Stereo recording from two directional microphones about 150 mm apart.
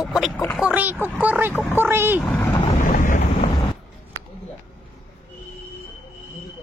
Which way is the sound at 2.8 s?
60° left (ahead or behind).